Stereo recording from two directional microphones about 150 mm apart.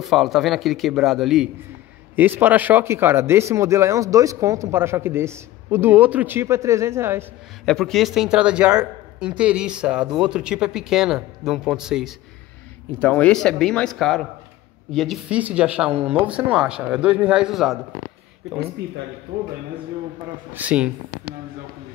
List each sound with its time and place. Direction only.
0.0 s speech: centre (ahead or behind)
2.1 s speech: 15° right (ahead or behind)
7.6 s speech: centre (ahead or behind)
13.0 s speech: 10° left (ahead or behind)
20.5 s speech: 10° right (ahead or behind)